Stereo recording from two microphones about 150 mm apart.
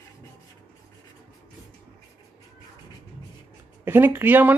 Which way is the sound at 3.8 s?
15° right (ahead or behind).